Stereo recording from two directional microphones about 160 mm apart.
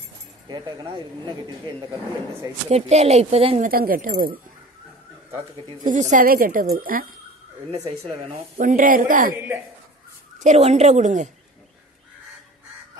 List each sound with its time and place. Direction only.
0.5 s speech: 25° right (ahead or behind)
2.7 s speech: 40° right (ahead or behind)
3.6 s speech: 65° right (ahead or behind)
5.9 s speech: 50° right (ahead or behind)
6.2 s speech: 60° right (ahead or behind)
8.1 s speech: 45° right (ahead or behind); by 9.3 s 60° right (ahead or behind)
10.4 s speech: 45° right (ahead or behind)